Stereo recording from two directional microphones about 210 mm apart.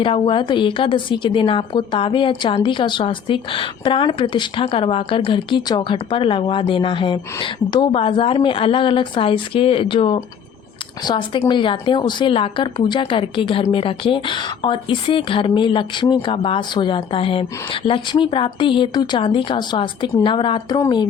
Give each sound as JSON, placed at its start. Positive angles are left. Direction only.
{"t": 0.0, "sound": "a woman's voice", "side_deg": 25}